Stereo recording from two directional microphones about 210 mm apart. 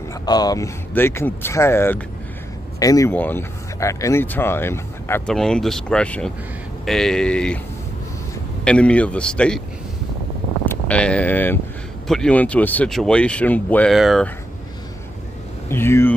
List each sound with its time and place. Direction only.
0.2 s speech: 20° left (ahead or behind)
8.6 s speech: 5° left (ahead or behind)
10.6 s vehicle: 5° left (ahead or behind)
12.1 s speech: 5° left (ahead or behind)
15.7 s speech: 10° left (ahead or behind)